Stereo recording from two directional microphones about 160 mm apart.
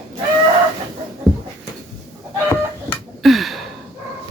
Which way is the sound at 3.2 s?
Centre (ahead or behind).